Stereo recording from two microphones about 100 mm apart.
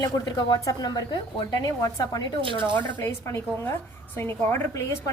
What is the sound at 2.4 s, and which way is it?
Speech, 60° right (ahead or behind).